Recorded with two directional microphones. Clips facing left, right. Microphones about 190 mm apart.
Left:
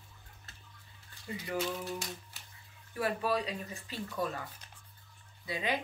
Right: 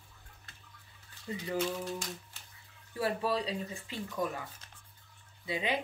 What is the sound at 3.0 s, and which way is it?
Speech, 30° right (ahead or behind).